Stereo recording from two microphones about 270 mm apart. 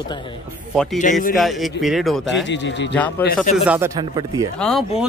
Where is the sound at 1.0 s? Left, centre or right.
Left.